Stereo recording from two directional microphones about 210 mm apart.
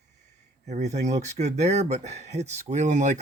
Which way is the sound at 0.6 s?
35° right (ahead or behind).